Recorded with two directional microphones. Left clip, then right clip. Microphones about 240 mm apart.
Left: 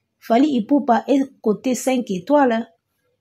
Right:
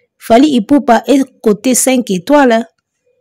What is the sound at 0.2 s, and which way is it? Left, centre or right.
Speech, right.